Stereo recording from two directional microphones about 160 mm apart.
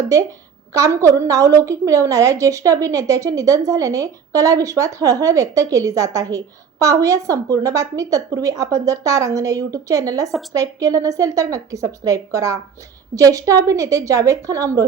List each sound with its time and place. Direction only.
0.7 s a woman's voice: 20° right (ahead or behind)